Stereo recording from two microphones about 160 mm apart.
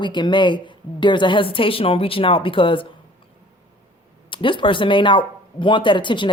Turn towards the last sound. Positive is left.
turn(degrees=30)  # may be behind; listen again after turning